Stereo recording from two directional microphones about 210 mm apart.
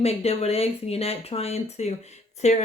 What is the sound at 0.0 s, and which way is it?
Speech, 30° left (ahead or behind).